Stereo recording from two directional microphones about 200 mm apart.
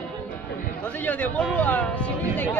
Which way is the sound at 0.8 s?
10° left (ahead or behind).